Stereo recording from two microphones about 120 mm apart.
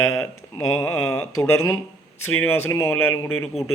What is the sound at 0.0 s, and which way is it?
A man's voice, 25° left (ahead or behind).